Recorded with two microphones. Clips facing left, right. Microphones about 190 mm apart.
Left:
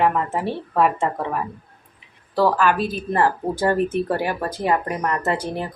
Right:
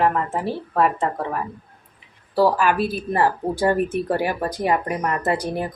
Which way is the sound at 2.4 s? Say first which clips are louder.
Even; 10° right (ahead or behind).